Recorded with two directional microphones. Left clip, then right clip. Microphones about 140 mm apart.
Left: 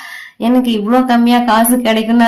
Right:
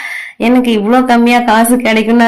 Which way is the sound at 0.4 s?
20° right (ahead or behind).